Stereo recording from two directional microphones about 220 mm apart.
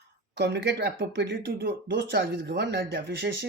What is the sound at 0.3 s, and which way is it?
Speech, 50° right (ahead or behind).